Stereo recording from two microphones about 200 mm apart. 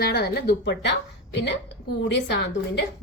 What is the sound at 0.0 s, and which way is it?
Speech, 55° left (ahead or behind).